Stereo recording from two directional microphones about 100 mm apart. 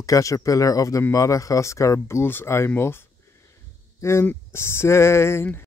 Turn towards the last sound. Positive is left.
turn(degrees=25)  # may be behind; listen again after turning